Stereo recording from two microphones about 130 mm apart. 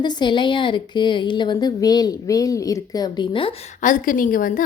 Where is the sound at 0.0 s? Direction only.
35° left (ahead or behind).